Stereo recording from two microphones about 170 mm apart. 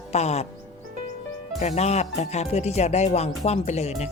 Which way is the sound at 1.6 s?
40° left (ahead or behind).